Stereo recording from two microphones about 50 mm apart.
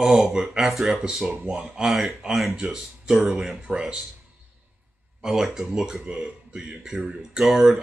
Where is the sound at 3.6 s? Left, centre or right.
Right.